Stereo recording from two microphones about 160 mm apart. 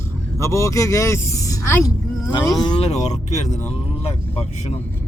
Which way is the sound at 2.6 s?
30° left (ahead or behind).